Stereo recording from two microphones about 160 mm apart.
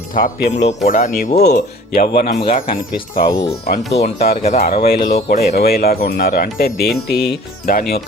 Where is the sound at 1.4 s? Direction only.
85° left; by 2.7 s 60° left (ahead or behind).